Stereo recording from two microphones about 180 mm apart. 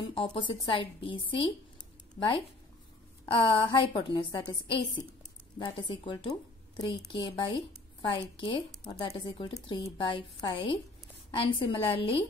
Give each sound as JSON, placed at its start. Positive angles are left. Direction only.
{"t": 0.0, "sound": "a woman's voice", "side_deg": 30}